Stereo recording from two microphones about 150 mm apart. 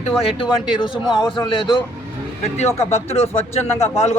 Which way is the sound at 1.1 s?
30° left (ahead or behind).